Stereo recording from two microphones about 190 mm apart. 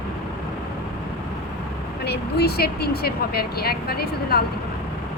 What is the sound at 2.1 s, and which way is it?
Speech, 55° left (ahead or behind).